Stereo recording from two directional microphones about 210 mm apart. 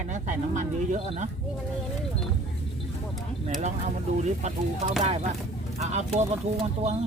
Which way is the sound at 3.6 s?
35° right (ahead or behind).